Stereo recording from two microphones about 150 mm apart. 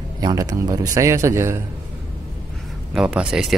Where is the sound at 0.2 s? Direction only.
25° right (ahead or behind).